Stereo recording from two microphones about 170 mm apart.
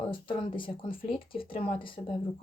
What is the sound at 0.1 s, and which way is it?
Speech, 30° left (ahead or behind).